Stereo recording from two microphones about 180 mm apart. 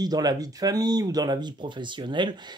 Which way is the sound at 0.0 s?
20° right (ahead or behind).